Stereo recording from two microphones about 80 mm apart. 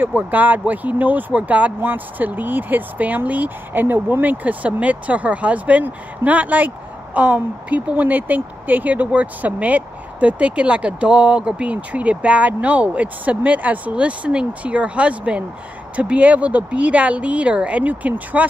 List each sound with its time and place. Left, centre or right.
0.0 s speech: right